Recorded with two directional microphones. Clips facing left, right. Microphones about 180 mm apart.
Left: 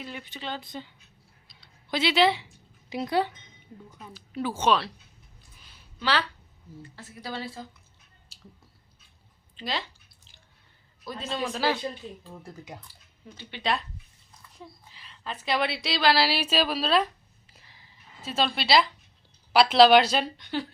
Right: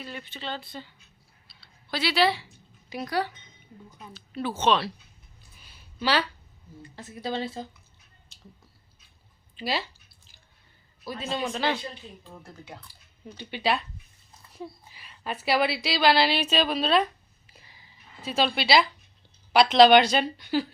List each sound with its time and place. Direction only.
0.0 s speech: 15° left (ahead or behind)
1.5 s a sound: 20° left (ahead or behind)
2.9 s speech: 20° left (ahead or behind)
4.1 s speech: 10° left (ahead or behind)
6.0 s speech: 10° right (ahead or behind)
9.6 s speech: 10° right (ahead or behind)
11.0 s speech: 5° right (ahead or behind)
12.4 s speech: 15° left (ahead or behind)
13.2 s speech: 15° right (ahead or behind)
14.9 s a woman's voice: 10° right (ahead or behind)